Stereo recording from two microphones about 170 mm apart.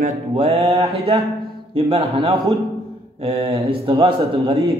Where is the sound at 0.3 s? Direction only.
35° right (ahead or behind).